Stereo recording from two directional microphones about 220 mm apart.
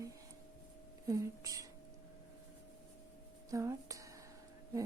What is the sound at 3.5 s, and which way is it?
Speech, 15° right (ahead or behind).